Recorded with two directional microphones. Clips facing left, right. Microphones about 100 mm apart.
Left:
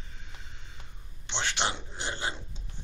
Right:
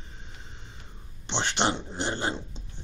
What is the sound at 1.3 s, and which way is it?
Speech, 25° right (ahead or behind).